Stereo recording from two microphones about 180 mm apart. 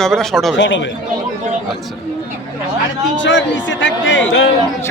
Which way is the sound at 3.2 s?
90° left.